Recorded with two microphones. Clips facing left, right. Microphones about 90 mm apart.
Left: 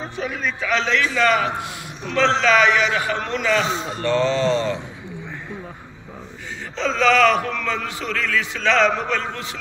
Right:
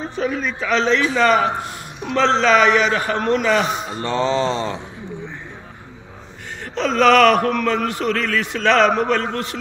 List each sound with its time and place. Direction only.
0.6 s a man's voice: 35° right (ahead or behind)
4.0 s mantra: 20° right (ahead or behind)
6.8 s a man's voice: 60° right (ahead or behind)